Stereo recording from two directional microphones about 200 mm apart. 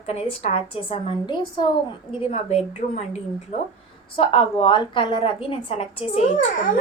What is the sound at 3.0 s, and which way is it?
A woman's voice, 35° left (ahead or behind).